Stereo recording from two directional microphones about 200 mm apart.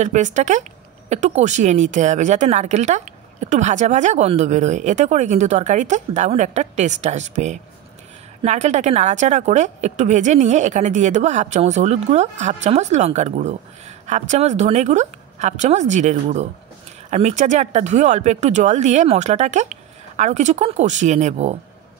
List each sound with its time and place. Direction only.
0.0 s speech: 35° right (ahead or behind)